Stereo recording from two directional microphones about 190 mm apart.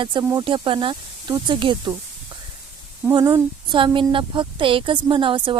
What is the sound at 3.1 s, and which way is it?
Speech, 20° right (ahead or behind).